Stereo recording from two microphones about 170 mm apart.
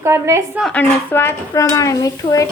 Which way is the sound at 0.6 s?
10° left (ahead or behind).